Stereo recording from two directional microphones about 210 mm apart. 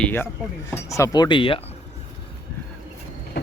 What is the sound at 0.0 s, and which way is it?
Speech, 10° left (ahead or behind).